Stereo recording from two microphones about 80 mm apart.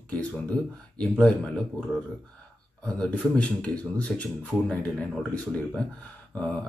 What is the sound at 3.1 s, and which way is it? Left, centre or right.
A man's voice, centre.